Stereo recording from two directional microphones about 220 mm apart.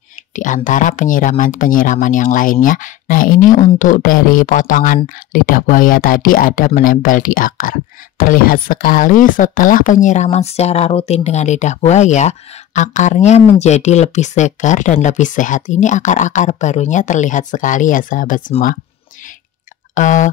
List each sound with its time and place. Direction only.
0.4 s speech: 35° left (ahead or behind)
19.9 s speech: 35° left (ahead or behind)